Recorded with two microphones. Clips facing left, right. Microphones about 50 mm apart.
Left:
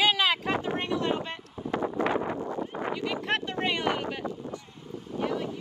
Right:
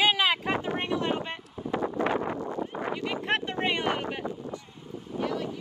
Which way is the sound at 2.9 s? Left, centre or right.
Right.